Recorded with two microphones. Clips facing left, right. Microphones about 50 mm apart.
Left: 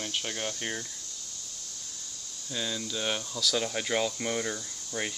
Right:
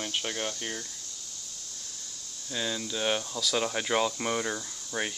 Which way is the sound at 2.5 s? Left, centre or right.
Centre.